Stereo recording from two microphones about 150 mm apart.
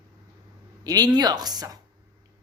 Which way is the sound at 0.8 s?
25° right (ahead or behind).